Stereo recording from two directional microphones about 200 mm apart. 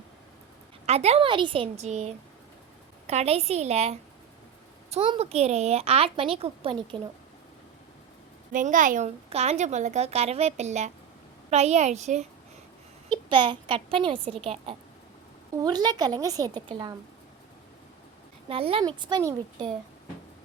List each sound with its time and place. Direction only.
0.9 s a woman's voice: 30° right (ahead or behind)
8.5 s a woman's voice: 40° right (ahead or behind)
13.1 s a woman's voice: 25° right (ahead or behind)
18.4 s a woman's voice: 30° right (ahead or behind)